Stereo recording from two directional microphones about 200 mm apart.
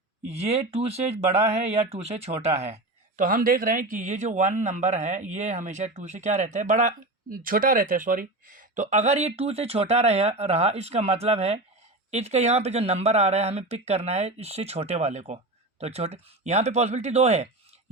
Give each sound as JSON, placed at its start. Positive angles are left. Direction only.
{"t": 0.3, "sound": "speech", "side_deg": -30}
{"t": 3.2, "sound": "speech", "side_deg": -45}